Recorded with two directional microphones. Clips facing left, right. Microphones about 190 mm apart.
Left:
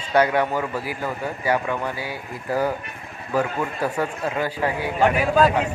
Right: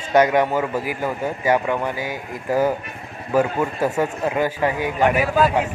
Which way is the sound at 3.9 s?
15° right (ahead or behind).